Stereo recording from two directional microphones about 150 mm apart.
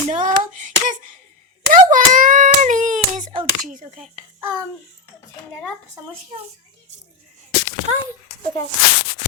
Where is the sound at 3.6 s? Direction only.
55° right (ahead or behind).